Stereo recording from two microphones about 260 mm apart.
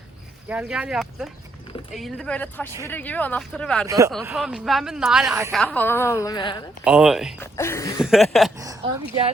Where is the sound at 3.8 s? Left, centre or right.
Centre.